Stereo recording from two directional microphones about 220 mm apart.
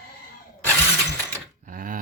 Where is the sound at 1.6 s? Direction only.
40° right (ahead or behind).